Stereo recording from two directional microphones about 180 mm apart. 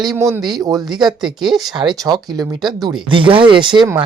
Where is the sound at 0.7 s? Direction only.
Centre (ahead or behind).